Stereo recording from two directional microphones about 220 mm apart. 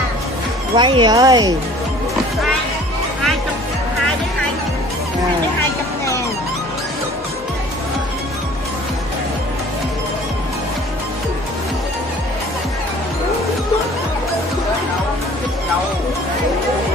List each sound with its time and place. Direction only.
0.7 s speech: 20° right (ahead or behind)